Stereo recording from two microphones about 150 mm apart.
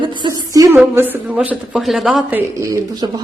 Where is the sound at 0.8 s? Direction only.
10° right (ahead or behind).